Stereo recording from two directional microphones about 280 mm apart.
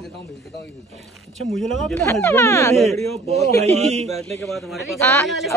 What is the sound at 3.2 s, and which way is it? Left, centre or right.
Speech, right.